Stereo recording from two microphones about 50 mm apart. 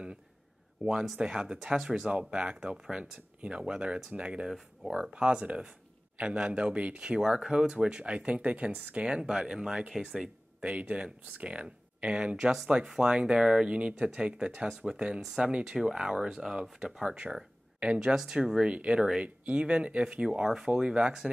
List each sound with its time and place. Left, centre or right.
0.8 s speech: right
1.2 s speech: centre
7.2 s speech: centre; by 9.1 s right
9.5 s speech: centre
15.1 s speech: centre